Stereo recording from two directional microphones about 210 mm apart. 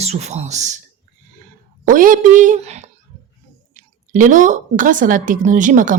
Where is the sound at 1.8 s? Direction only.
40° right (ahead or behind).